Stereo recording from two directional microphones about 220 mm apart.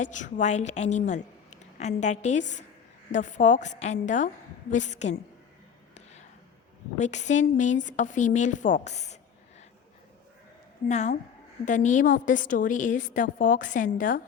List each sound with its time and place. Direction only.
0.0 s a woman's voice: 35° left (ahead or behind)
7.0 s a woman's voice: 30° left (ahead or behind)
10.8 s a woman's voice: 30° left (ahead or behind)